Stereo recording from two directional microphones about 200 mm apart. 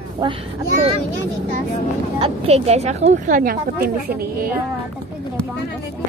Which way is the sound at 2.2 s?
30° right (ahead or behind).